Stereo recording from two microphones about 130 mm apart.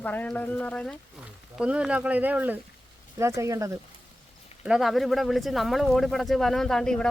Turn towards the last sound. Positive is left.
turn(degrees=5)  # may be behind; listen again after turning